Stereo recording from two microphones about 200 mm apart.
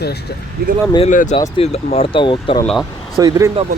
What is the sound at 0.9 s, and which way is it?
Speech, 35° left (ahead or behind).